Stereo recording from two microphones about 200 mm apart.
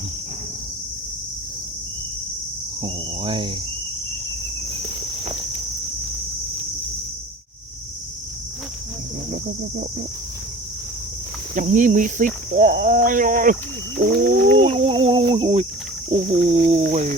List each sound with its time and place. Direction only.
2.8 s speech: 25° right (ahead or behind)
11.5 s speech: 40° right (ahead or behind)
14.6 s speech: 30° right (ahead or behind)